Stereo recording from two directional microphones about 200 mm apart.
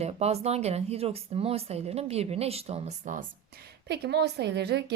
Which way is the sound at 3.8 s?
55° right (ahead or behind).